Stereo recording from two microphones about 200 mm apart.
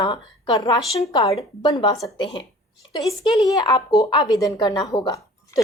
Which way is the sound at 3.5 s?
20° left (ahead or behind).